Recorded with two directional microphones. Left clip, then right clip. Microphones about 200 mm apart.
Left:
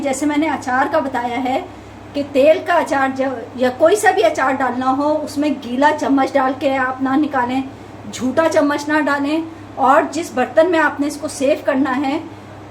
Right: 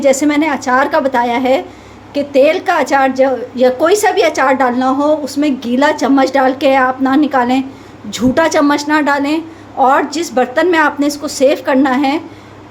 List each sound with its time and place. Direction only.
0.0 s a woman's voice: 45° right (ahead or behind)